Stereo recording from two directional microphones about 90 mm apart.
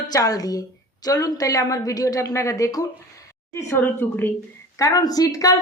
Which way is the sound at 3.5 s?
30° left (ahead or behind).